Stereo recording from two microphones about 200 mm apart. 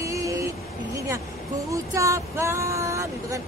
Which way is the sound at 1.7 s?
15° right (ahead or behind).